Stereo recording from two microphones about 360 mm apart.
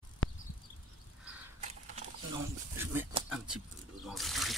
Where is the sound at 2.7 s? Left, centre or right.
Centre.